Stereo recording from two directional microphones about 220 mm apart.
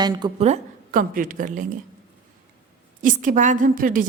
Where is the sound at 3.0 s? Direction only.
35° right (ahead or behind).